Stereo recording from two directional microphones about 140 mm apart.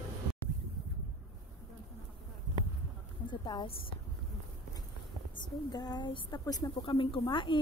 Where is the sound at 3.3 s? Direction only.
30° left (ahead or behind).